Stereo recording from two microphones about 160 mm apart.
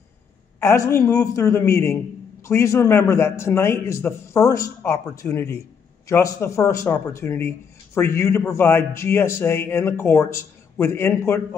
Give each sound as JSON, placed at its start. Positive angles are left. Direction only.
{"t": 0.6, "sound": "speech", "side_deg": 15}